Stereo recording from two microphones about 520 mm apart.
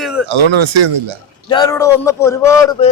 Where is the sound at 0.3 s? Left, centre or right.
Right.